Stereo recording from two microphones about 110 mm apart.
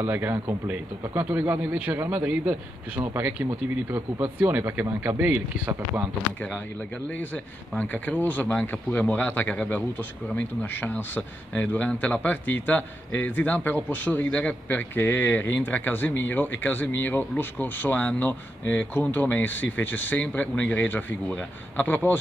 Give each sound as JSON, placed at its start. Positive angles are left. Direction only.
{"t": 0.0, "sound": "speech", "side_deg": -20}
{"t": 7.1, "sound": "speech", "side_deg": 15}